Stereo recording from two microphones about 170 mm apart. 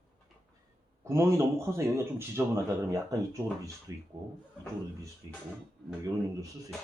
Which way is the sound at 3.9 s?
20° right (ahead or behind).